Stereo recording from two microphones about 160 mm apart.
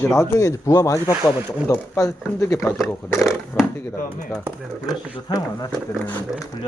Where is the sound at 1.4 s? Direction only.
15° right (ahead or behind).